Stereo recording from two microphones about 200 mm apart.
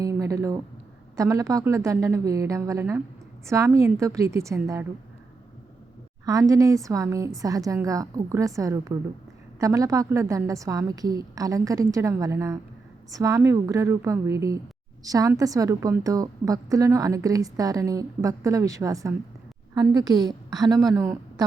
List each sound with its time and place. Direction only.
0.0 s a woman's voice: 15° right (ahead or behind)
6.2 s a woman's voice: 15° right (ahead or behind)